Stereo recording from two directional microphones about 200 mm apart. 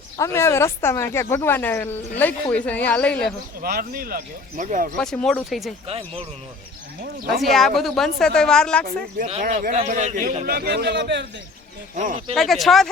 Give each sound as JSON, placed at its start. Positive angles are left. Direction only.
{"t": 0.3, "sound": "speech", "side_deg": 15}
{"t": 3.6, "sound": "a man's voice", "side_deg": -50}
{"t": 4.9, "sound": "speech", "side_deg": 5}
{"t": 5.9, "sound": "speech", "side_deg": -30}
{"t": 7.4, "sound": "speech", "side_deg": 0}
{"t": 9.1, "sound": "a man's voice", "side_deg": -35}
{"t": 11.9, "sound": "speech", "side_deg": -35}
{"t": 12.3, "sound": "speech", "side_deg": 0}